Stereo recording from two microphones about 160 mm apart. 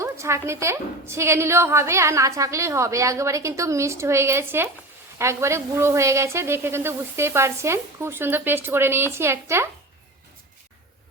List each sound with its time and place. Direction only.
0.0 s a woman's voice: 15° right (ahead or behind)